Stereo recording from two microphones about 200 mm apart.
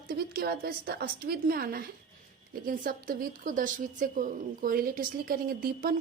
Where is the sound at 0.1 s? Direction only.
50° right (ahead or behind).